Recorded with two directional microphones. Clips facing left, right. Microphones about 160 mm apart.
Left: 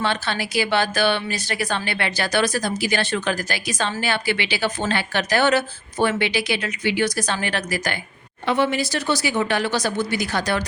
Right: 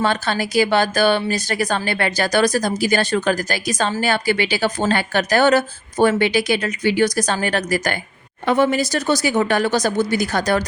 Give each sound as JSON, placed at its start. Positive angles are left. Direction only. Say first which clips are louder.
{"t": 0.0, "sound": "speech", "louder": "right 4 dB", "side_deg": -45}